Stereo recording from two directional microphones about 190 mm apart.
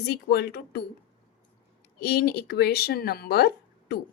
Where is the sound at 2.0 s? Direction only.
55° left (ahead or behind).